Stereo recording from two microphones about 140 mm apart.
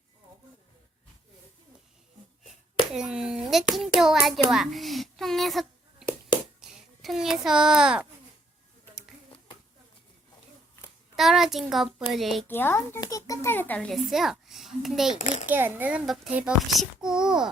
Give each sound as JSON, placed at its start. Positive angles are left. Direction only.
{"t": 2.9, "sound": "speech", "side_deg": -5}
{"t": 3.8, "sound": "hands", "side_deg": 0}
{"t": 6.6, "sound": "a child's voice", "side_deg": 0}
{"t": 11.2, "sound": "a child's voice", "side_deg": 0}
{"t": 12.5, "sound": "a child's voice", "side_deg": 15}
{"t": 15.4, "sound": "a child's voice", "side_deg": -15}